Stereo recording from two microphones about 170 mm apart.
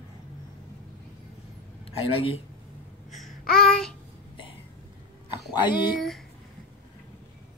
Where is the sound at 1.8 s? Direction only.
35° left (ahead or behind).